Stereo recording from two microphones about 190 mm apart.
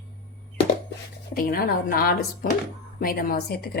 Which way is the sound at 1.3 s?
50° left (ahead or behind).